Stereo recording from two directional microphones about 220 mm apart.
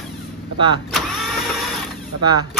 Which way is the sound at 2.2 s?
20° right (ahead or behind).